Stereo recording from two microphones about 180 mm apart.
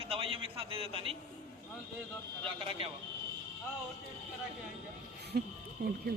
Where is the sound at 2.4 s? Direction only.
30° right (ahead or behind).